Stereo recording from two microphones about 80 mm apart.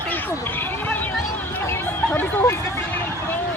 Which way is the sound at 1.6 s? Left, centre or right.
Left.